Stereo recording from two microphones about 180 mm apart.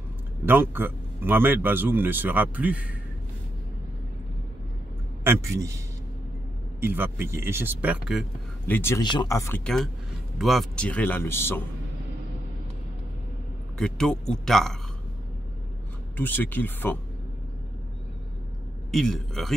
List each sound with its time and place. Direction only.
0.5 s speech: 10° right (ahead or behind)
5.2 s a man's voice: 15° right (ahead or behind)
6.8 s speech: 10° right (ahead or behind)
8.6 s speech: 10° left (ahead or behind)
9.0 s speech: 25° left (ahead or behind)
10.4 s speech: centre (ahead or behind)
13.7 s a man's voice: 5° left (ahead or behind)
16.2 s speech: 10° left (ahead or behind)
18.9 s a man's voice: centre (ahead or behind)